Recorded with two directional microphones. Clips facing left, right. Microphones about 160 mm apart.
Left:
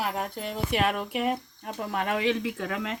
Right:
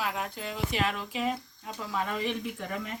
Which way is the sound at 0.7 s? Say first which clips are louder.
Left 7 dB; 60° left (ahead or behind).